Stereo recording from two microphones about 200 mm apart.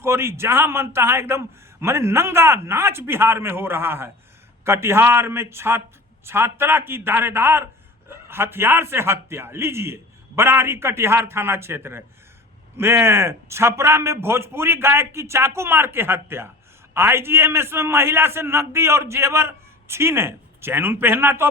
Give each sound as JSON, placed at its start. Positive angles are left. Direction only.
{"t": 0.0, "sound": "a man's voice", "side_deg": -15}